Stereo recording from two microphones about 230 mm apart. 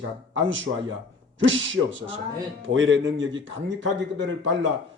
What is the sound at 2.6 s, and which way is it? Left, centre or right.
A man's voice, right.